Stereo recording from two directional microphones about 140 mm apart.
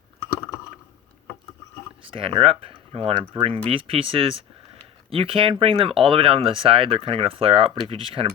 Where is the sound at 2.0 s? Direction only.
40° right (ahead or behind).